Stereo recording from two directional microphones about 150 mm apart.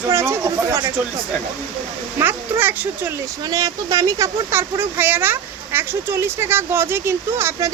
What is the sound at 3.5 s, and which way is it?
Speech, 25° right (ahead or behind).